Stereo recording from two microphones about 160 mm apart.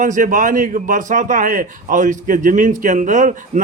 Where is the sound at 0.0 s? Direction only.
55° right (ahead or behind).